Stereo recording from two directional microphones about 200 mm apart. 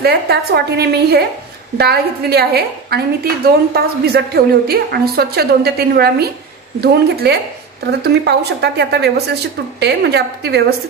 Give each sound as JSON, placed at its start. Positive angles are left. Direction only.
{"t": 0.0, "sound": "a woman's voice", "side_deg": -50}